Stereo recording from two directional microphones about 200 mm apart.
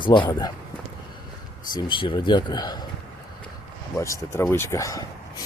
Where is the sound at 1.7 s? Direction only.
25° left (ahead or behind).